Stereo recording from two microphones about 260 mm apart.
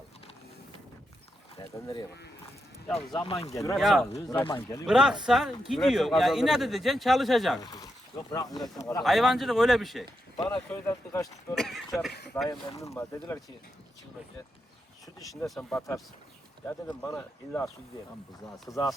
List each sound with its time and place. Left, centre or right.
1.5 s speech: centre
3.8 s a man's voice: centre
4.1 s speech: centre
4.9 s a man's voice: centre
7.6 s speech: centre
9.0 s a man's voice: centre
10.3 s speech: centre
12.5 s speech: centre
15.2 s speech: centre
15.4 s a man's voice: centre
18.7 s speech: centre